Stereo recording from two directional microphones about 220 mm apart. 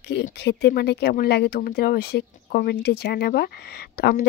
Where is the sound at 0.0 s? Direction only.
50° left (ahead or behind).